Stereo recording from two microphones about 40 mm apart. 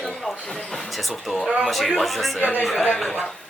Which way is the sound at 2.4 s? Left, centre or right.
Left.